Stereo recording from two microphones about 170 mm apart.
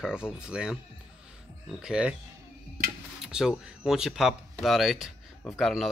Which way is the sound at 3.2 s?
5° right (ahead or behind).